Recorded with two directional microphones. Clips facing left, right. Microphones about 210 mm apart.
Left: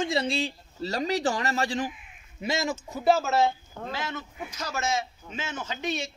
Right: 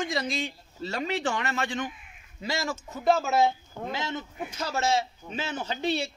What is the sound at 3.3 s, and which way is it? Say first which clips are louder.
A man's voice: even; 15° right (ahead or behind).